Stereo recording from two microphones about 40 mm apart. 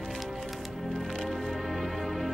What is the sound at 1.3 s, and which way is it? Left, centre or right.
Music, centre.